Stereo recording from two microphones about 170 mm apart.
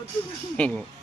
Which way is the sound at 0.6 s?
5° left (ahead or behind).